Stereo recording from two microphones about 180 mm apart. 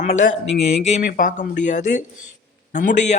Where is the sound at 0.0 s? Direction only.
45° left (ahead or behind).